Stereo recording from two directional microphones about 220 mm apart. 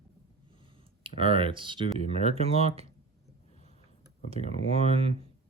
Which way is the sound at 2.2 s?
25° right (ahead or behind).